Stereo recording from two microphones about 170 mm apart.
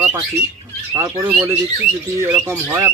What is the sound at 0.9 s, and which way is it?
Speech, 15° right (ahead or behind).